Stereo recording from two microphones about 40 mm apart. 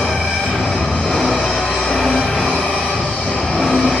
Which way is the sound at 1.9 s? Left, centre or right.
Centre.